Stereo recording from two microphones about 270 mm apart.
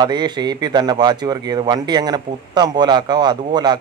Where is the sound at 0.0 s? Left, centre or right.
Centre.